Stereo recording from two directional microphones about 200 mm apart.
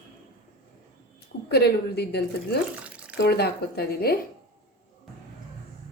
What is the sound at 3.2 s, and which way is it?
Speech, 55° left (ahead or behind).